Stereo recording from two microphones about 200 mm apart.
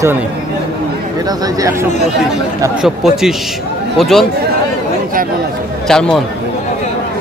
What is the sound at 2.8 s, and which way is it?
Speech, centre (ahead or behind).